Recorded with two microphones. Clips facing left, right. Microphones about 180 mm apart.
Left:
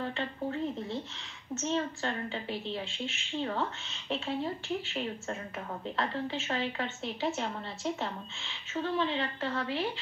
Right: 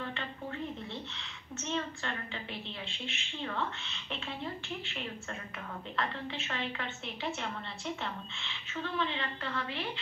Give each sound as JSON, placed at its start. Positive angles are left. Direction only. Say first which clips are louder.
{"t": 1.6, "sound": "a woman's voice", "louder": "left 4 dB", "side_deg": 35}
{"t": 5.9, "sound": "a woman's voice", "louder": "left 3 dB", "side_deg": 35}